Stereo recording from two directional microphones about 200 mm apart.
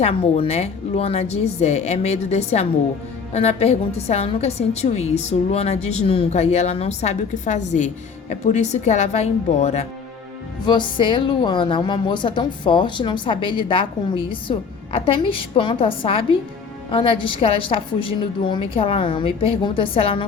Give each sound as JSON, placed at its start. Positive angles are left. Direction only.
{"t": 0.0, "sound": "a woman's voice", "side_deg": 30}
{"t": 10.7, "sound": "a woman's voice", "side_deg": 25}